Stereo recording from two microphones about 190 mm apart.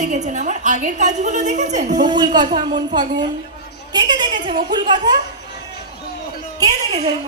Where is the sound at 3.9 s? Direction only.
25° right (ahead or behind).